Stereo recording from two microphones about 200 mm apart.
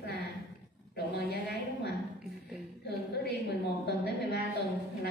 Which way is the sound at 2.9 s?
55° left (ahead or behind).